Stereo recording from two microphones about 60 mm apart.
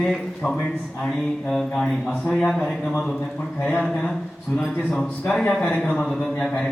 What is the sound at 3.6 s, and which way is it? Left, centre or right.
A man's voice, centre.